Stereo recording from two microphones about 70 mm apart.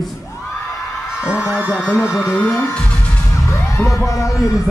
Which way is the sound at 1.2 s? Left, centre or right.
Centre.